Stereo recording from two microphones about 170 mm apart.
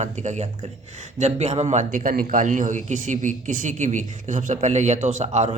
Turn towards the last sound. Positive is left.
turn(degrees=-40)  # may be behind; listen again after turning